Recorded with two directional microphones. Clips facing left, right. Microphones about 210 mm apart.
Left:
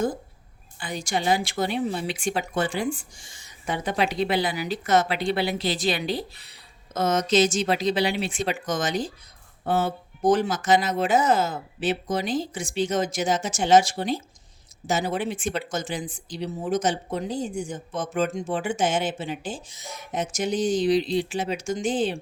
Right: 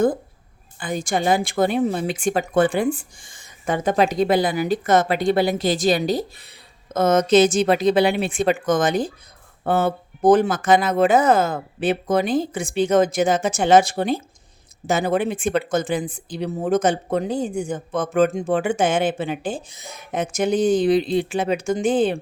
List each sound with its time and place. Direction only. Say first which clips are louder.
0.8 s speech: right 5 dB; 50° right (ahead or behind)